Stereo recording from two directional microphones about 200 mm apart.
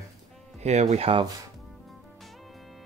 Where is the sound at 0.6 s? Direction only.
35° right (ahead or behind).